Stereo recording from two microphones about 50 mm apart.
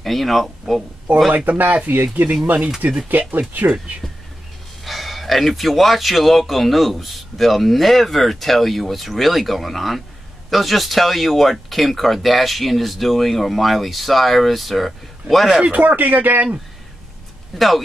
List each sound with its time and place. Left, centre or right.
0.0 s speech: centre
1.3 s speech: right
4.8 s speech: centre
15.6 s speech: right
17.6 s speech: centre